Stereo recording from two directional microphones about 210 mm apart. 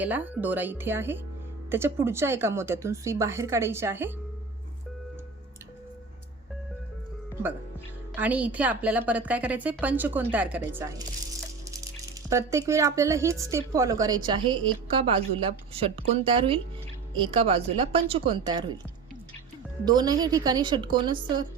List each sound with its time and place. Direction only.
0.0 s a woman's voice: 10° right (ahead or behind)
8.1 s a woman's voice: 5° right (ahead or behind)
12.3 s a woman's voice: 15° right (ahead or behind)
19.8 s speech: 20° right (ahead or behind)